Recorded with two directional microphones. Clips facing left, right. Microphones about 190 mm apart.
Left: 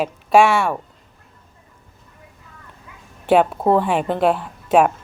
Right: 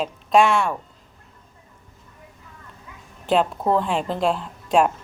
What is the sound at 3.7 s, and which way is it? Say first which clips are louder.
Speech: left 3 dB; 65° left (ahead or behind).